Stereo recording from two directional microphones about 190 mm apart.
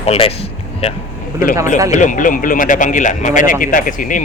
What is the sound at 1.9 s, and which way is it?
A man's voice, 40° left (ahead or behind).